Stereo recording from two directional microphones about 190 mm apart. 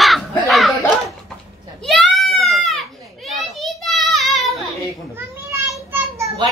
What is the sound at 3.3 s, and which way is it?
Children playing, centre (ahead or behind).